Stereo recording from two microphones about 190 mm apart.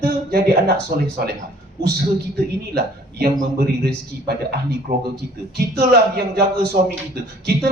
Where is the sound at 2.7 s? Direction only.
55° right (ahead or behind).